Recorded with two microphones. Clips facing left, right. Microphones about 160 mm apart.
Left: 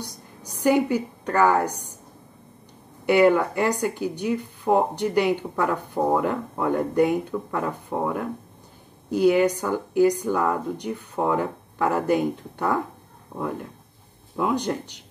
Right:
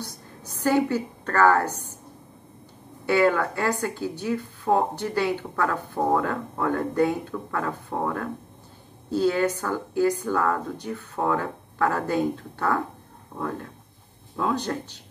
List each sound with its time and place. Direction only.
0.0 s a woman's voice: 15° left (ahead or behind)
3.1 s speech: 20° left (ahead or behind)